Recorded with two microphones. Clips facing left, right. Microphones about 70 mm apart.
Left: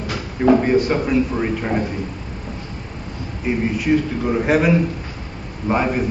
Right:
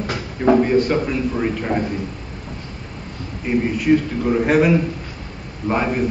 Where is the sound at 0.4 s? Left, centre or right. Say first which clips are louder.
Even; centre.